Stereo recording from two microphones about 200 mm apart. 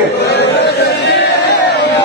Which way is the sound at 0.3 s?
55° left (ahead or behind).